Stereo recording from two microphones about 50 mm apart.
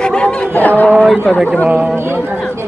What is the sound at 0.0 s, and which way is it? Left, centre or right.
Chatter, left.